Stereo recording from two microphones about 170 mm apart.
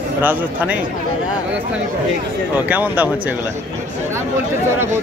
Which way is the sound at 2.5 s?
10° right (ahead or behind).